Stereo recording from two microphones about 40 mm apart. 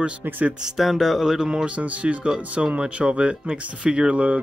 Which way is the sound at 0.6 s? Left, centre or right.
Centre.